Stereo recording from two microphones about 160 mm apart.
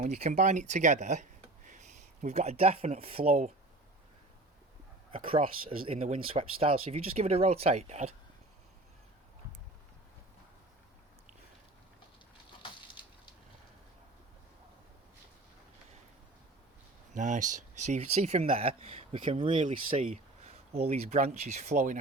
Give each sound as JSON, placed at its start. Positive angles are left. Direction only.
{"t": 0.0, "sound": "speech", "side_deg": -50}
{"t": 3.2, "sound": "speech", "side_deg": -50}
{"t": 5.1, "sound": "speech", "side_deg": -35}
{"t": 17.2, "sound": "speech", "side_deg": -50}